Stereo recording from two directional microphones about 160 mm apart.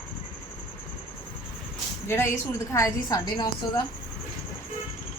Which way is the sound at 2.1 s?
15° left (ahead or behind).